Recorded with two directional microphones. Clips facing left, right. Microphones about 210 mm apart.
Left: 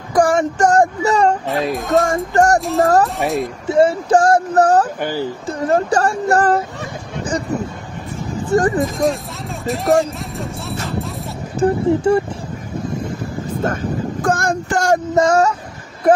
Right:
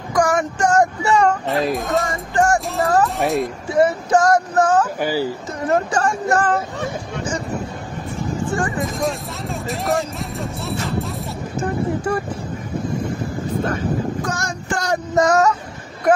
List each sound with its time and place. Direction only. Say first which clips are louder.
0.1 s a sound: left 4 dB; 30° left (ahead or behind)
0.6 s speech: left 2 dB; 40° left (ahead or behind)
1.5 s speech: left 2 dB; centre (ahead or behind)
2.1 s speech: left 4 dB; 40° left (ahead or behind)
2.6 s speech: left 4 dB; centre (ahead or behind)
3.6 s speech: left 5 dB; 25° left (ahead or behind)
5.0 s speech: right 1 dB; 10° right (ahead or behind)
5.5 s speech: left 5 dB; 35° left (ahead or behind)
8.7 s speech: left 5 dB; centre (ahead or behind)
10.7 s music: right 2 dB; centre (ahead or behind)
11.5 s speech: left 7 dB; 25° left (ahead or behind)
14.2 s a sound: left 8 dB; 55° left (ahead or behind)
15.1 s speech: right 1 dB; 25° left (ahead or behind)